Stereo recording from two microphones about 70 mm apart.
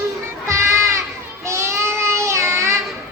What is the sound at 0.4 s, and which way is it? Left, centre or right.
Music, right.